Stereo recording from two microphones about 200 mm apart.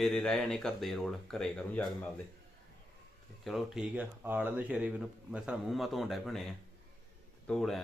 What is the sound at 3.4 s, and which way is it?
Speech, centre (ahead or behind).